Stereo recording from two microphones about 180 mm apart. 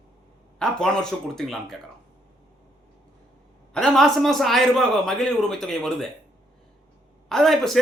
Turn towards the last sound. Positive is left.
turn(degrees=0)  # may be behind; listen again after turning